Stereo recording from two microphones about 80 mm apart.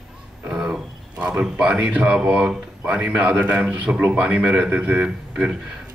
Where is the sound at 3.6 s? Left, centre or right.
Centre.